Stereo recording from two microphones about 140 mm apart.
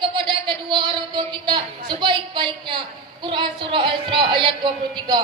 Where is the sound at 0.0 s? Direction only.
35° right (ahead or behind).